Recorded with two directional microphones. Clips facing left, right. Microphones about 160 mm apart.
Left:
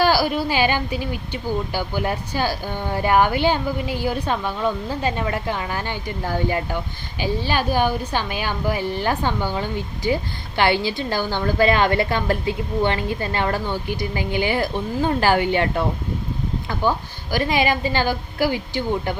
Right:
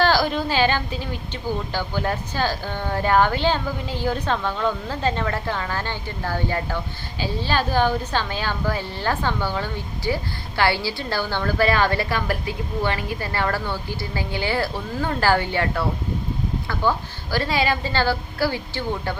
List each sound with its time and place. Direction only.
0.0 s a woman's voice: 10° left (ahead or behind)
17.3 s speech: 15° left (ahead or behind)